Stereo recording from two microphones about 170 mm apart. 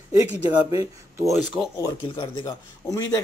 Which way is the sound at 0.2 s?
20° right (ahead or behind).